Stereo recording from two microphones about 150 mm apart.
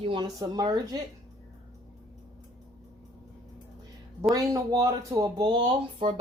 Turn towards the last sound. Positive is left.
turn(degrees=-35)  # may be behind; listen again after turning